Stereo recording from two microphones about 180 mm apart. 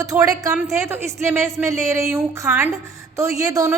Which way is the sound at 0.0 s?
20° right (ahead or behind).